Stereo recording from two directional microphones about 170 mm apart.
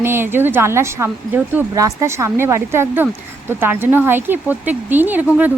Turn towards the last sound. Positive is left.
turn(degrees=-10)  # may be behind; listen again after turning